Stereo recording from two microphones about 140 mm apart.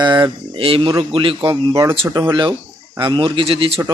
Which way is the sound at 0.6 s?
40° right (ahead or behind).